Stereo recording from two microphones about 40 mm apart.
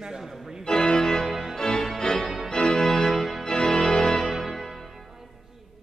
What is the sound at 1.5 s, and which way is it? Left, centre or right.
Organ, centre.